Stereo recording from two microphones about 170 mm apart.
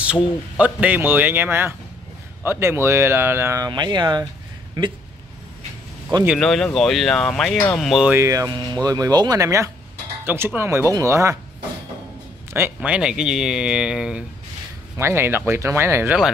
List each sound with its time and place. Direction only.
0.0 s speech: 5° right (ahead or behind); by 4.3 s 25° right (ahead or behind)
6.2 s speech: centre (ahead or behind)
8.1 s speech: 15° right (ahead or behind)
12.5 s speech: 10° right (ahead or behind)